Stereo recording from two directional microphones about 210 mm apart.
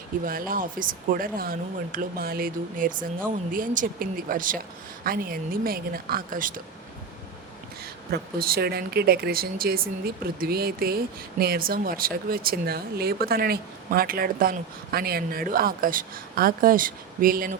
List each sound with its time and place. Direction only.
0.3 s speech: 40° right (ahead or behind)
8.1 s speech: 45° right (ahead or behind)